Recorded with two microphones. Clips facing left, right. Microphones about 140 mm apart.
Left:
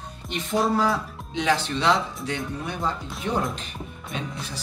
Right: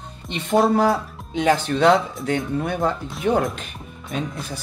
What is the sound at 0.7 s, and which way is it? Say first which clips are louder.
Speech: right 5 dB; 55° right (ahead or behind).